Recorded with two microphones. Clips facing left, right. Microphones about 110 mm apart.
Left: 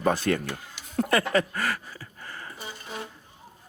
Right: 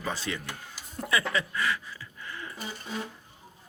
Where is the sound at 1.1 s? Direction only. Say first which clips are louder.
Left 4 dB; 50° left (ahead or behind).